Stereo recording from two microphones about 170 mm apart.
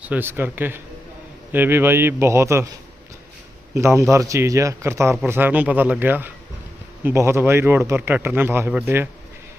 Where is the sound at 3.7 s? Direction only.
15° right (ahead or behind).